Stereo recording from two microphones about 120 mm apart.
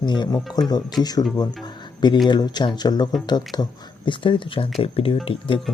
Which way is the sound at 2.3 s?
35° left (ahead or behind).